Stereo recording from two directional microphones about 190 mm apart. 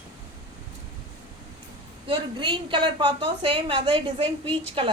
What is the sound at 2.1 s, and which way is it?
A woman's voice, 25° right (ahead or behind).